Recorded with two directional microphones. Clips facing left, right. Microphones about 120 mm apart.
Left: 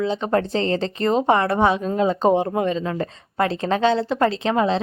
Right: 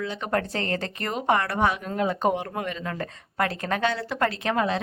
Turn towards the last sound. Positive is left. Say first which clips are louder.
# left 5 dB
turn(degrees=25)  # may be behind; listen again after turning